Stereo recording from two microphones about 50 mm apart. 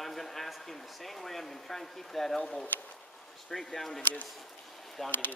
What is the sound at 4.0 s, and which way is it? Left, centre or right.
Speech, left.